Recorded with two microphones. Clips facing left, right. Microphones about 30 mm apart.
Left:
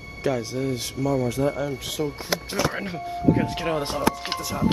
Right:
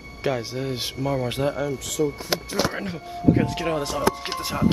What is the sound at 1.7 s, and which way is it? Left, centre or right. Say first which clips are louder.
Speech: right 3 dB; left.